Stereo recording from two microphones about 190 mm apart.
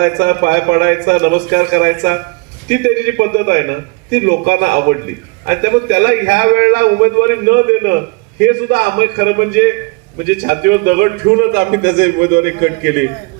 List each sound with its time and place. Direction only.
0.0 s a man's voice: 50° right (ahead or behind)